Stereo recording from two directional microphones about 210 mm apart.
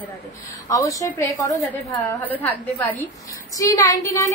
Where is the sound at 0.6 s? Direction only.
15° left (ahead or behind).